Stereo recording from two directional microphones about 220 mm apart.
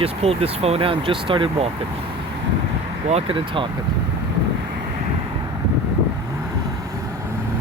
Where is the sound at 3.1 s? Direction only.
25° right (ahead or behind).